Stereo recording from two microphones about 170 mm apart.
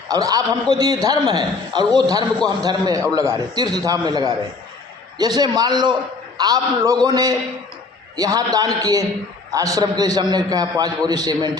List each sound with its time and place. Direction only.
0.1 s a man's voice: 20° right (ahead or behind)